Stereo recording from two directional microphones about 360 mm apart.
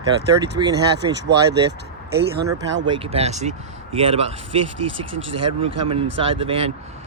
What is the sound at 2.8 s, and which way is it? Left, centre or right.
Speech, centre.